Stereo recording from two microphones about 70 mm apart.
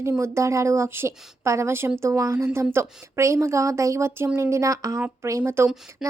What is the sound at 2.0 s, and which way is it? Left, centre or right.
Speech, right.